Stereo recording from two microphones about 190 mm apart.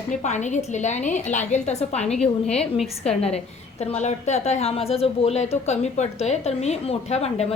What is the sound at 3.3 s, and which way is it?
A woman's voice, 35° left (ahead or behind).